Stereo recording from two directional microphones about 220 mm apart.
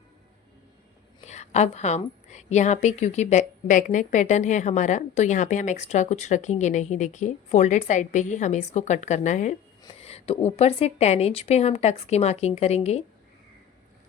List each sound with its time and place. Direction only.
1.2 s a woman's voice: 30° left (ahead or behind)